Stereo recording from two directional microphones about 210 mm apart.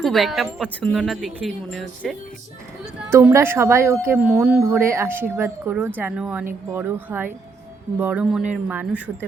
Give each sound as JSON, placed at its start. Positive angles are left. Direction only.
{"t": 0.0, "sound": "speech", "side_deg": 0}
{"t": 3.1, "sound": "speech", "side_deg": -15}